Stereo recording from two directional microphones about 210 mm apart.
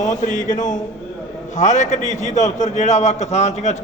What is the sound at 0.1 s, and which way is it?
A man's voice, 35° left (ahead or behind).